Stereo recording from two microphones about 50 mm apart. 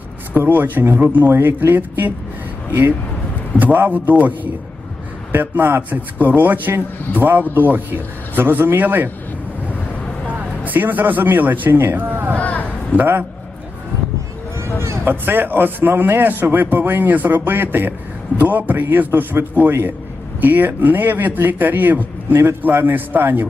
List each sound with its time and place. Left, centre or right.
0.3 s a man's voice: right
3.6 s a man's voice: right
5.3 s a man's voice: right
10.2 s a man's voice: right
12.4 s a sound: left
13.0 s a man's voice: right
14.8 s a sound: right
15.1 s a man's voice: right
20.4 s a man's voice: right